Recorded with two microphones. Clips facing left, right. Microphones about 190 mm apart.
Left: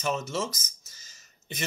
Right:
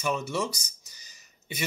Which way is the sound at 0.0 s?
15° right (ahead or behind).